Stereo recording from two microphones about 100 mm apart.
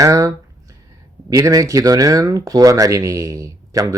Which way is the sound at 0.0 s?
35° right (ahead or behind).